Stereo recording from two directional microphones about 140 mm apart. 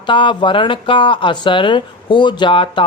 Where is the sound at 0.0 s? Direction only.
35° left (ahead or behind).